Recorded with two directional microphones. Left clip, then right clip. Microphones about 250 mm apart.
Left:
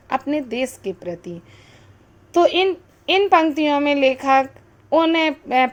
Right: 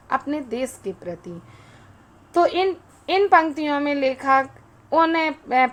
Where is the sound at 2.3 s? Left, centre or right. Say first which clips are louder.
Left 3 dB; left.